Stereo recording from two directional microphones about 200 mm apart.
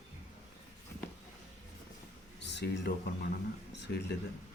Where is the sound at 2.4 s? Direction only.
60° left (ahead or behind).